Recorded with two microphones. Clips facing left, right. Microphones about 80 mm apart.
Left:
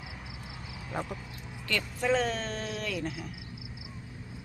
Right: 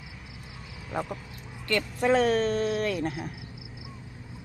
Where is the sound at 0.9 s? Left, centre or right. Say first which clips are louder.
Right 4 dB; centre.